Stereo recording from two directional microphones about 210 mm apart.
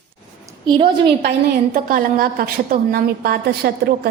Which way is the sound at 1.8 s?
45° right (ahead or behind).